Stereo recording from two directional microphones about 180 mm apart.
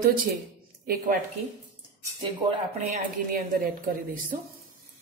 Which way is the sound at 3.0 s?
50° right (ahead or behind).